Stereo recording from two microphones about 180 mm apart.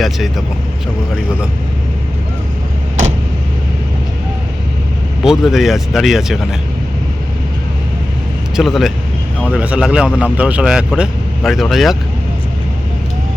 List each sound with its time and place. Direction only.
0.0 s speech: centre (ahead or behind)
5.2 s speech: centre (ahead or behind)
8.5 s speech: centre (ahead or behind)